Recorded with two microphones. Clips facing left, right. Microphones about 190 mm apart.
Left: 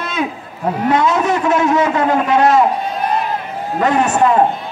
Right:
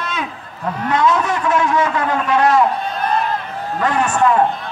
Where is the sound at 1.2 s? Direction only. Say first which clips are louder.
Left 3 dB; 25° left (ahead or behind).